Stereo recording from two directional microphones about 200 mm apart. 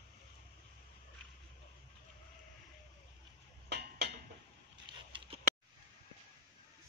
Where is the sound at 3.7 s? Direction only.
55° right (ahead or behind).